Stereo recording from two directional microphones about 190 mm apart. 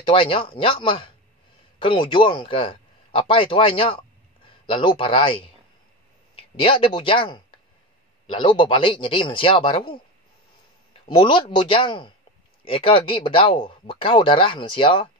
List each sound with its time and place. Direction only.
0.0 s speech: 25° left (ahead or behind)